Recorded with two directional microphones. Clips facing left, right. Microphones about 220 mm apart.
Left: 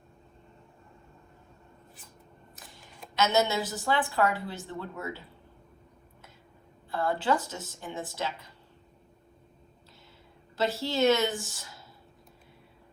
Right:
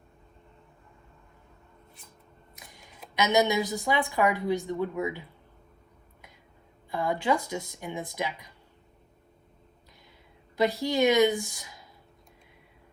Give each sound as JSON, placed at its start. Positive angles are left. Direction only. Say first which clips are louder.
{"t": 3.2, "sound": "a woman's voice", "louder": "right 2 dB", "side_deg": -15}
{"t": 6.9, "sound": "a woman's voice", "louder": "right 1 dB", "side_deg": -15}
{"t": 10.6, "sound": "a woman's voice", "louder": "right 2 dB", "side_deg": -15}